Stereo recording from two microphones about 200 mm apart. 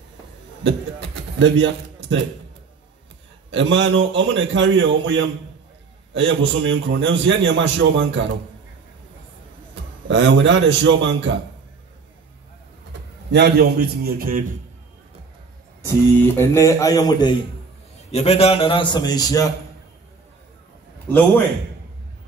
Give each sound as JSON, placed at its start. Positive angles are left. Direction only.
{"t": 0.7, "sound": "speech", "side_deg": -65}
{"t": 3.4, "sound": "a man's voice", "side_deg": -65}
{"t": 10.0, "sound": "a man's voice", "side_deg": -65}
{"t": 13.3, "sound": "a man's voice", "side_deg": -55}
{"t": 16.3, "sound": "speech", "side_deg": 15}
{"t": 18.1, "sound": "a man's voice", "side_deg": 30}